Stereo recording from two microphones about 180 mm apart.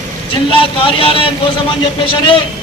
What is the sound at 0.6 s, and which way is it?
Speech, 30° left (ahead or behind).